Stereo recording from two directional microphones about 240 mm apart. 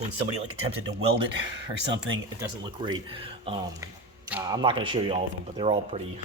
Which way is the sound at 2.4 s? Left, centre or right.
Centre.